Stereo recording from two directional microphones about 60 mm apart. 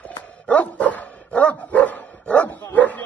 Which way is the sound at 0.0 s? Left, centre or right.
Left.